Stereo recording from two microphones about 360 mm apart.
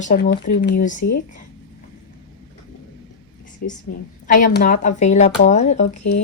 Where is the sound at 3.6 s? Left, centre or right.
Left.